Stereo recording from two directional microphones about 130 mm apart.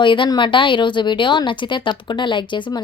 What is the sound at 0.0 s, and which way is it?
Speech, 40° left (ahead or behind).